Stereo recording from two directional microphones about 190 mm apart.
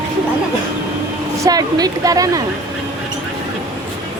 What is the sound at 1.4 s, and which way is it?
A woman's voice, 20° right (ahead or behind).